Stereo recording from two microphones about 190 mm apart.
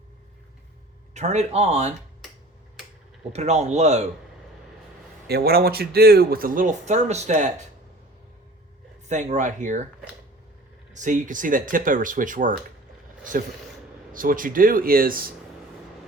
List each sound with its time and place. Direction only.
1.1 s speech: 35° right (ahead or behind)
3.3 s speech: 35° right (ahead or behind)
5.3 s speech: 55° right (ahead or behind); by 7.5 s 40° right (ahead or behind)
9.0 s speech: 40° right (ahead or behind)
10.9 s speech: 40° right (ahead or behind)
14.1 s speech: 45° right (ahead or behind)